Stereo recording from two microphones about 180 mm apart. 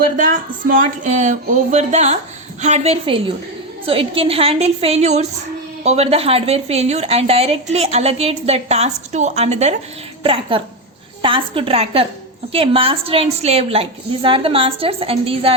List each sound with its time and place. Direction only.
0.7 s a woman's voice: 45° right (ahead or behind)